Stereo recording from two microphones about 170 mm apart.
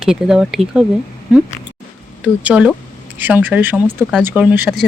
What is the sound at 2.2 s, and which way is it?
Speech, 10° right (ahead or behind).